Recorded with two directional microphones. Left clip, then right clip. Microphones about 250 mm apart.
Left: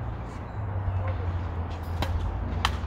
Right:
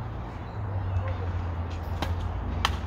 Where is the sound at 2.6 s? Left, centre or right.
Centre.